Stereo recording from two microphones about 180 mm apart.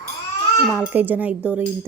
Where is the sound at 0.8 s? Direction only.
10° right (ahead or behind).